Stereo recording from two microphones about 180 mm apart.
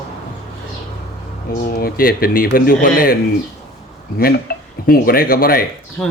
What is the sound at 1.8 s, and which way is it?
Speech, 55° left (ahead or behind).